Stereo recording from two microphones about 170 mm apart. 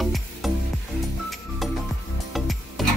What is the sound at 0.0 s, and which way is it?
Music, centre (ahead or behind).